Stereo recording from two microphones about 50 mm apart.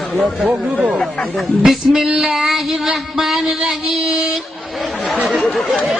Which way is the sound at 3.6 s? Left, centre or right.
Right.